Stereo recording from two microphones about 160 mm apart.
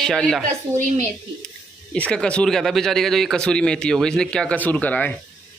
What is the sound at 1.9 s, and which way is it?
Speech, 5° left (ahead or behind).